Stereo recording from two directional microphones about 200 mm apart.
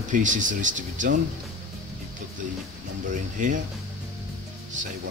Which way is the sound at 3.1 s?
40° right (ahead or behind).